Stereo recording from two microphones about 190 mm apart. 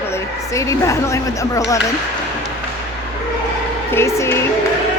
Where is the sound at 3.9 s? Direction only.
15° left (ahead or behind).